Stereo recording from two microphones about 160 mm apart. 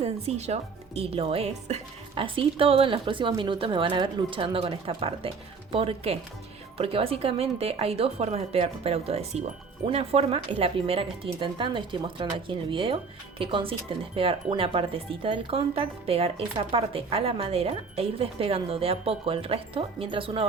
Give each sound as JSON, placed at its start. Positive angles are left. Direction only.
{"t": 0.0, "sound": "speech", "side_deg": -45}